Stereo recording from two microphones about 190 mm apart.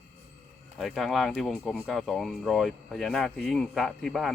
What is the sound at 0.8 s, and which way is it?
Speech, centre (ahead or behind).